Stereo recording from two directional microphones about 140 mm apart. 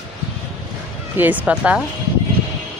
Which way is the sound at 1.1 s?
10° right (ahead or behind).